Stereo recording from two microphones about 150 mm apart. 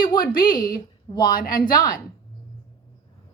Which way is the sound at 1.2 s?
75° left (ahead or behind).